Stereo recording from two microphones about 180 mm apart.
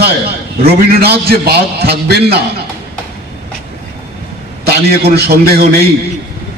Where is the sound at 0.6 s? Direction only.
60° right (ahead or behind).